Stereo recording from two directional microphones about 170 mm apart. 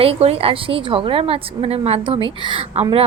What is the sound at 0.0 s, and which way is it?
Speech, 35° right (ahead or behind).